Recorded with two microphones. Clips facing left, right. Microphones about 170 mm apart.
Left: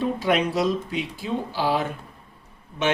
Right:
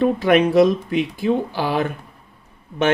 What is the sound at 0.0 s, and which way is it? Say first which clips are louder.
Speech: right 7 dB; 55° right (ahead or behind).